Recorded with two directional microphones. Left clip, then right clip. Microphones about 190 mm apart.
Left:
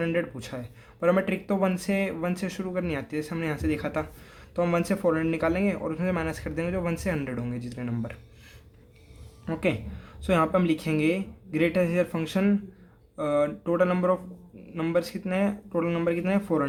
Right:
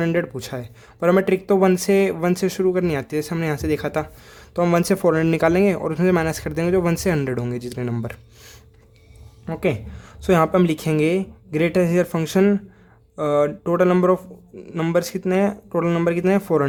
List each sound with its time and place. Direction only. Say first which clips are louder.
0.0 s speech: right 6 dB; 40° right (ahead or behind)